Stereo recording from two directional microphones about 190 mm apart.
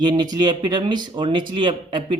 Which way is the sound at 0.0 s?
20° right (ahead or behind).